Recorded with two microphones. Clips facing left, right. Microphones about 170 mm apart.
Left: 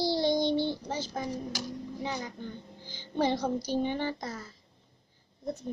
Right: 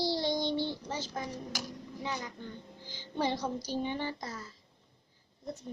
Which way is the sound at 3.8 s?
55° left (ahead or behind).